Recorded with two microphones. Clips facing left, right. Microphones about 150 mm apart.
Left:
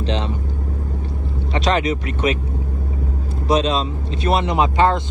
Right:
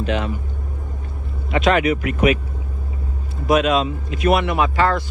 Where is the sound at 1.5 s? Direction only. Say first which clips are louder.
Right 3 dB; 30° left (ahead or behind).